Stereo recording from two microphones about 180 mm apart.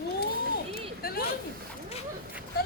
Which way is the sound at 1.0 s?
55° left (ahead or behind).